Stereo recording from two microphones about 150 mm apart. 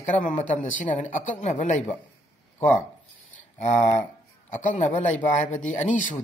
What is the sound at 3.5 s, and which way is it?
Speech, 50° left (ahead or behind).